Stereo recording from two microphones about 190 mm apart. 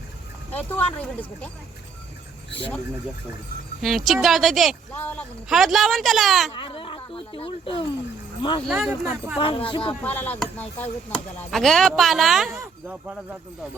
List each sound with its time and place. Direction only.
0.5 s speech: 10° left (ahead or behind)
3.8 s speech: centre (ahead or behind)
6.5 s speech: 25° left (ahead or behind)
8.6 s speech: centre (ahead or behind)
9.0 s speech: 10° right (ahead or behind)
9.4 s speech: 30° left (ahead or behind)
10.0 s speech: 10° left (ahead or behind)